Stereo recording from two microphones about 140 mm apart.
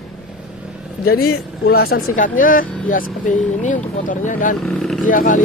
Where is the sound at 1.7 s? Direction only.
90° left; by 4.5 s 70° left (ahead or behind).